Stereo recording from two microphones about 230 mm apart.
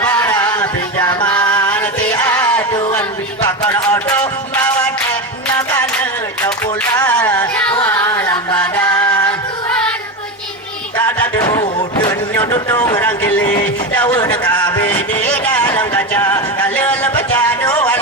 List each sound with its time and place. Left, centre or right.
0.0 s music: centre
6.9 s music: centre
10.9 s a sound: centre
15.3 s music: centre